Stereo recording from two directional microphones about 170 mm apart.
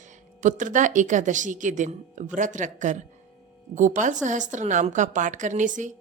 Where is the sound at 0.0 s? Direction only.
50° right (ahead or behind).